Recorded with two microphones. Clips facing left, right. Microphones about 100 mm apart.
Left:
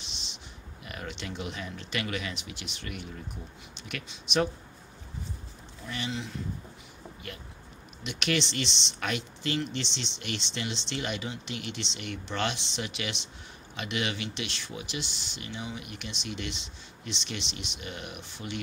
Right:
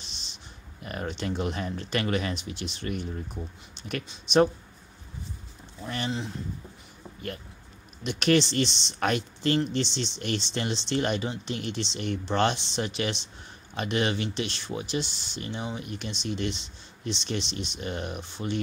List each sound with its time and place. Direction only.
0.0 s a sound: 40° right (ahead or behind)
0.8 s speech: 40° right (ahead or behind)
5.9 s speech: 40° right (ahead or behind)
8.0 s speech: 40° right (ahead or behind)